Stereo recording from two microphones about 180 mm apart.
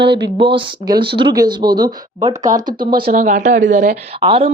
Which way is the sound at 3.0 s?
50° right (ahead or behind).